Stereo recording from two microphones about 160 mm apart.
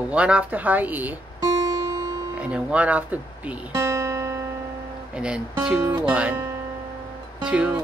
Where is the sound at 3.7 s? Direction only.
20° right (ahead or behind).